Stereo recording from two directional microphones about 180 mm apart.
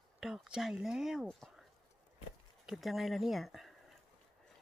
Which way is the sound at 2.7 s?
Centre (ahead or behind).